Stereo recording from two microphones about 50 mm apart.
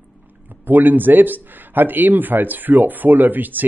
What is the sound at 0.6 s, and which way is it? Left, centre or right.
A man's voice, right.